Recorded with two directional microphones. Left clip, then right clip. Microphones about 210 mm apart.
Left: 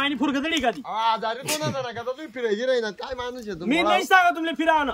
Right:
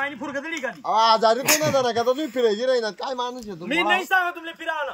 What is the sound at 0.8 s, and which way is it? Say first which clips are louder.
Speech: right 7 dB; 45° right (ahead or behind).